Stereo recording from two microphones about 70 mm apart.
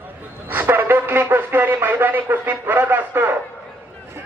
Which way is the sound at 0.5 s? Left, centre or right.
Right.